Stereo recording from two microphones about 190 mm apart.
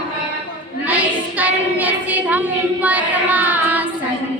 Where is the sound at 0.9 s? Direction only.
10° right (ahead or behind).